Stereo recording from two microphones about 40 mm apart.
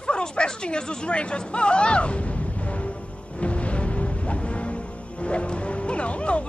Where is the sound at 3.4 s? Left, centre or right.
Left.